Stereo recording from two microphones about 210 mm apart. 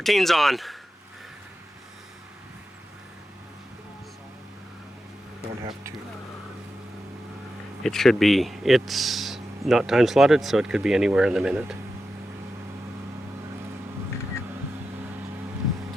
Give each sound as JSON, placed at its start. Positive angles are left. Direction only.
{"t": 0.0, "sound": "speech", "side_deg": 0}
{"t": 5.4, "sound": "a sound", "side_deg": -15}
{"t": 7.9, "sound": "speech", "side_deg": 0}